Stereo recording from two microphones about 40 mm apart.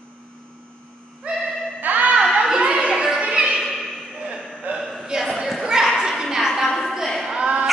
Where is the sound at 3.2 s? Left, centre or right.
Right.